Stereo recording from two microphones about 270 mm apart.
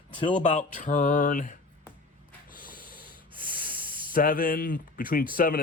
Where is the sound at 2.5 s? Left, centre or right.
Left.